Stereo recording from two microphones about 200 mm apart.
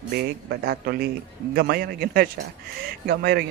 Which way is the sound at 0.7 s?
55° right (ahead or behind).